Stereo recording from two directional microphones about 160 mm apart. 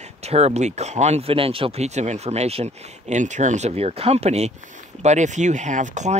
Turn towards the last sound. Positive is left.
turn(degrees=-50)  # may be behind; listen again after turning